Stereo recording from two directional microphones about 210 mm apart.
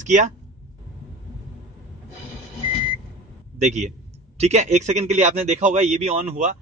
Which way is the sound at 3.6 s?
35° right (ahead or behind).